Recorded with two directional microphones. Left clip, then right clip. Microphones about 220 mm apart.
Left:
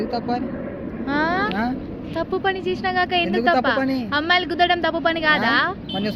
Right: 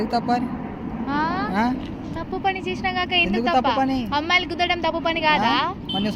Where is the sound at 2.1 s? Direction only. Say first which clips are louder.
Left 2 dB; 40° left (ahead or behind).